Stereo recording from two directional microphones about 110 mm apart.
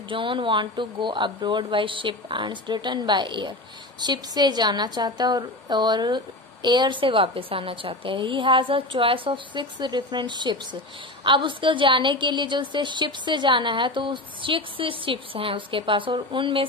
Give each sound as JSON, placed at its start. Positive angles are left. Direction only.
{"t": 0.1, "sound": "a woman's voice", "side_deg": -50}